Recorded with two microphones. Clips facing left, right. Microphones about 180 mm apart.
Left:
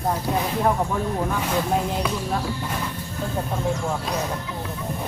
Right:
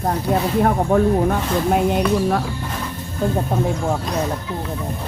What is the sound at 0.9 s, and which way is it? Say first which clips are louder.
Speech: right 10 dB; 55° right (ahead or behind).